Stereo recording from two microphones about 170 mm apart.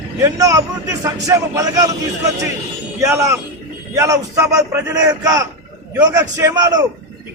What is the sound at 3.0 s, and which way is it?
A man's voice, 15° right (ahead or behind).